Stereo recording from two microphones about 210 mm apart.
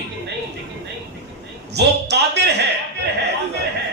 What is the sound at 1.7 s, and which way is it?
Speech, 50° right (ahead or behind).